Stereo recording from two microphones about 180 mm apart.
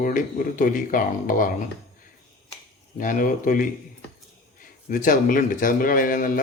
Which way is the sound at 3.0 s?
45° left (ahead or behind).